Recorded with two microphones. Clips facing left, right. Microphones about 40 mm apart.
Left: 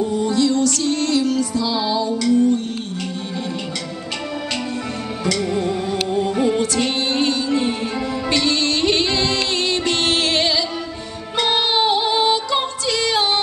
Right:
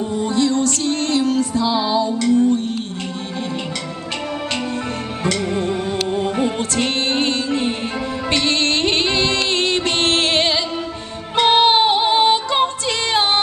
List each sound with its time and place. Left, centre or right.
0.0 s music: right
5.2 s music: right
6.0 s music: centre
6.6 s music: right